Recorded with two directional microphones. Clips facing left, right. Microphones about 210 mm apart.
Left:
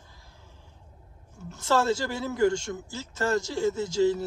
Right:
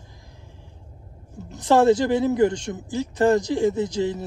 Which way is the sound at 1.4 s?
15° right (ahead or behind).